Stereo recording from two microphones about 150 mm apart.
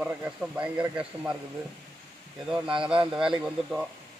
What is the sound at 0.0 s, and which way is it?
Speech, 10° right (ahead or behind).